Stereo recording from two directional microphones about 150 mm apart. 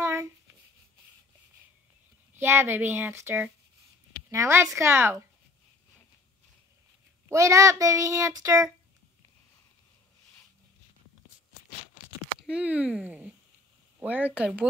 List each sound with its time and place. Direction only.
0.0 s a sound: 20° right (ahead or behind)
2.3 s a child's voice: 15° right (ahead or behind)
7.2 s a child's voice: 20° right (ahead or behind)
12.4 s speech: 10° right (ahead or behind)